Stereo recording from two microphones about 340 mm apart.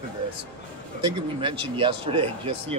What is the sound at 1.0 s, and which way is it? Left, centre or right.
Speech, centre.